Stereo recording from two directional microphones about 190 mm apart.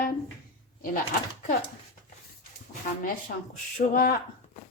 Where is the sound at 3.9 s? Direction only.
45° left (ahead or behind).